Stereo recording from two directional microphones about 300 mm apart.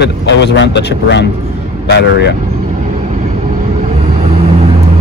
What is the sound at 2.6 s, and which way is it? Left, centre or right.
Vehicle, right.